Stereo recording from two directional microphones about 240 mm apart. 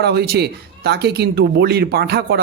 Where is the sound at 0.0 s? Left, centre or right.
Right.